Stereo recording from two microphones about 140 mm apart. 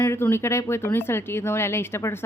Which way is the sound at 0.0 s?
15° left (ahead or behind).